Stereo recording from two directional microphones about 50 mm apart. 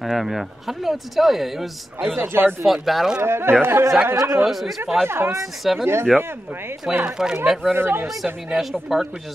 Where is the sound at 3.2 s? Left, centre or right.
Right.